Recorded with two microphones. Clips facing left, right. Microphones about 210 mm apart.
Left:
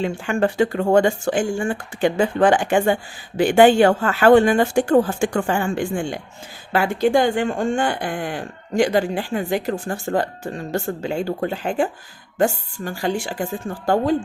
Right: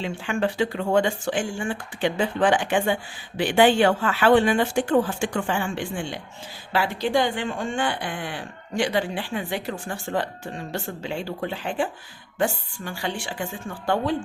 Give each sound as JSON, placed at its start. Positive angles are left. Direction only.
{"t": 0.0, "sound": "speech", "side_deg": 45}